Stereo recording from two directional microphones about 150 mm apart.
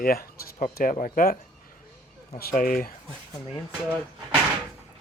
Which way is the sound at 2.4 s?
70° left (ahead or behind).